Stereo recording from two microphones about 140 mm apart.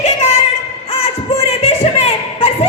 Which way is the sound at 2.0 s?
45° left (ahead or behind).